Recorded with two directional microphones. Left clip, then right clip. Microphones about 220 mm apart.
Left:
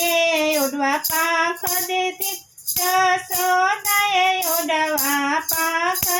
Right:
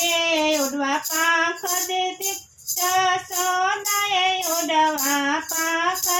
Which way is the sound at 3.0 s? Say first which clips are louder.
Left 3 dB; 30° left (ahead or behind).